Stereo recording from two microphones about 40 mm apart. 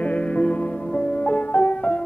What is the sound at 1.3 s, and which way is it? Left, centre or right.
Music, left.